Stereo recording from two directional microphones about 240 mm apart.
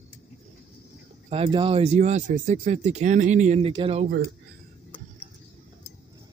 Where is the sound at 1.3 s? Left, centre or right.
Right.